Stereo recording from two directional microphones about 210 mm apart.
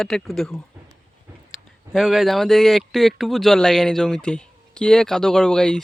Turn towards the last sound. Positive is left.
turn(degrees=5)  # may be behind; listen again after turning